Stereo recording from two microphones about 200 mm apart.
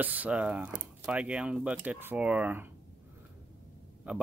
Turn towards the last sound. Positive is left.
turn(degrees=-5)  # may be behind; listen again after turning